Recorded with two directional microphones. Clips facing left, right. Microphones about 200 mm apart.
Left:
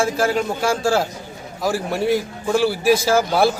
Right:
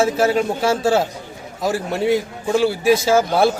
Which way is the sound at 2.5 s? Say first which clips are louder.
Right 1 dB; 20° right (ahead or behind).